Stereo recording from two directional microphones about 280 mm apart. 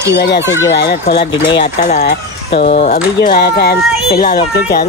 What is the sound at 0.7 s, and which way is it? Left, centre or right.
Speech, left.